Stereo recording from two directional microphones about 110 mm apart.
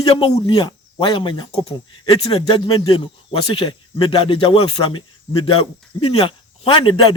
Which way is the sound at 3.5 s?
50° left (ahead or behind).